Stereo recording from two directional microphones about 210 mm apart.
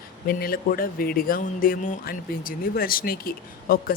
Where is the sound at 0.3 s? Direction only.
45° left (ahead or behind).